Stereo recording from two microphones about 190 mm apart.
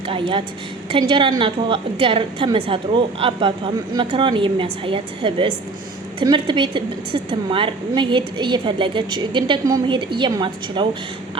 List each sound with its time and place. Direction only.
0.1 s a woman's voice: 25° right (ahead or behind)